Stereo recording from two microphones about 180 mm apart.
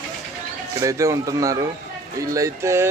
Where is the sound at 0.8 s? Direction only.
15° right (ahead or behind).